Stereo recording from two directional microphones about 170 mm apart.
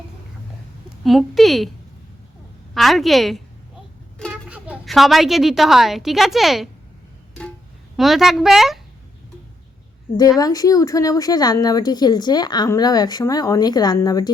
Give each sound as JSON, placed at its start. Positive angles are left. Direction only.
{"t": 1.0, "sound": "a woman's voice", "side_deg": 0}
{"t": 2.7, "sound": "a woman's voice", "side_deg": 0}
{"t": 7.9, "sound": "a woman's voice", "side_deg": 0}
{"t": 10.2, "sound": "speech", "side_deg": 20}